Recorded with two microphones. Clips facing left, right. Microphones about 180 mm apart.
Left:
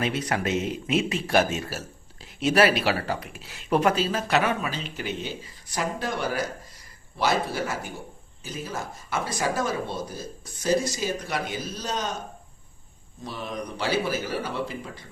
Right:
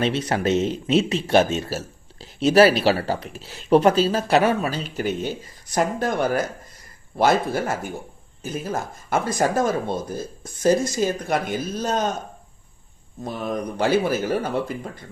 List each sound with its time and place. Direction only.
0.0 s speech: 30° right (ahead or behind); by 12.1 s 50° right (ahead or behind)
13.2 s speech: 50° right (ahead or behind)